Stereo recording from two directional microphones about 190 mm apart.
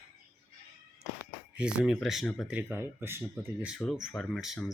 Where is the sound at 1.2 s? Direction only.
5° right (ahead or behind).